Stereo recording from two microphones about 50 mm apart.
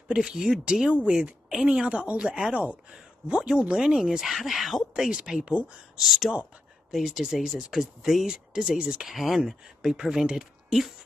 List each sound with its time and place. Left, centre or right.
0.1 s speech: centre
5.1 s speech: centre
5.9 s speech: centre
9.1 s speech: centre